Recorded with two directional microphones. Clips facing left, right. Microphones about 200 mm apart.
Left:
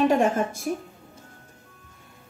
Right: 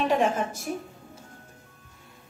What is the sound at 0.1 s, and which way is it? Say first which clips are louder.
Speech: left 3 dB; 50° left (ahead or behind).